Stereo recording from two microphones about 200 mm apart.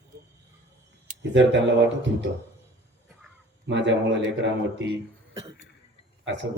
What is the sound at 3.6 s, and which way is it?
A man's voice, 60° right (ahead or behind).